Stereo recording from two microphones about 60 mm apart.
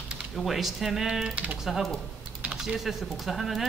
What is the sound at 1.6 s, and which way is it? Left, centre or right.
A woman's voice, centre.